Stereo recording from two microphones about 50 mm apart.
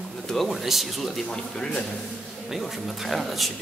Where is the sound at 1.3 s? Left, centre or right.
Centre.